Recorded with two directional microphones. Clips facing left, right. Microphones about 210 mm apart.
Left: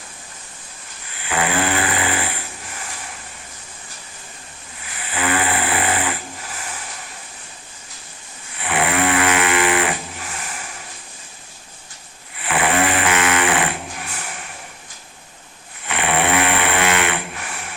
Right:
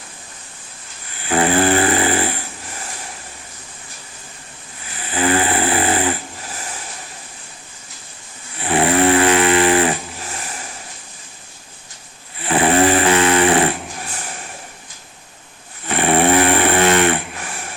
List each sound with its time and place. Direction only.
1.3 s snoring: 35° right (ahead or behind)
4.9 s snoring: 35° right (ahead or behind)
8.6 s snoring: 35° right (ahead or behind)
12.4 s snoring: 35° right (ahead or behind)
15.9 s a sound: 40° right (ahead or behind)